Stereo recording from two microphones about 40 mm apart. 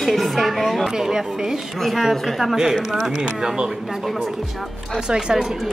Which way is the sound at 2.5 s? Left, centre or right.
Centre.